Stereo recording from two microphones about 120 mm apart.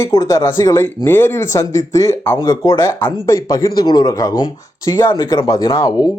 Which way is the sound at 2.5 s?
40° left (ahead or behind).